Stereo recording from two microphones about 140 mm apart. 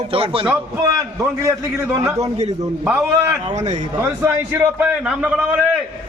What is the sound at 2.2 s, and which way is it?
Speech, 50° right (ahead or behind).